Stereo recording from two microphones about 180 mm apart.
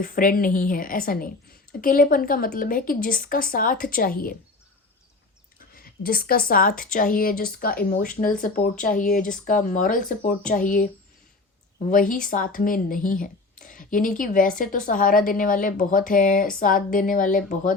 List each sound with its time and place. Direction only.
0.0 s speech: 50° left (ahead or behind)
5.5 s speech: 55° left (ahead or behind)
11.9 s speech: 45° left (ahead or behind)